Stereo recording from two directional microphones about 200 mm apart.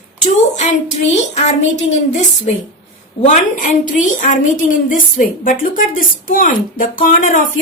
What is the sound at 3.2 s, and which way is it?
A woman's voice, 40° left (ahead or behind).